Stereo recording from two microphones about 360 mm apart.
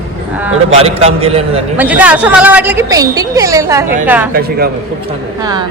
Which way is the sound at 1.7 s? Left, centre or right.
Centre.